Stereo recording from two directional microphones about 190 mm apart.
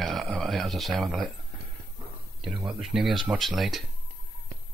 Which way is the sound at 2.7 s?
Centre (ahead or behind).